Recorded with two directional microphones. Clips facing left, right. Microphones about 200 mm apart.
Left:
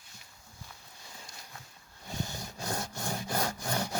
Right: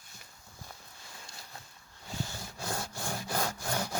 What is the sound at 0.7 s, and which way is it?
Walk, 45° right (ahead or behind).